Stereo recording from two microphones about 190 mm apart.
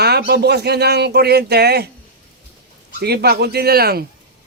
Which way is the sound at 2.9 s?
60° right (ahead or behind).